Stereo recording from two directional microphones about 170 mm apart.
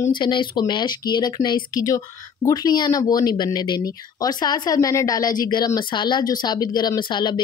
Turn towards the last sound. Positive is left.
turn(degrees=25)  # may be behind; listen again after turning